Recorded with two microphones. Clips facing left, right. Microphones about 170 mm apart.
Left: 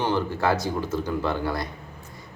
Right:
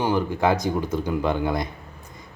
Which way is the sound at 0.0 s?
15° right (ahead or behind).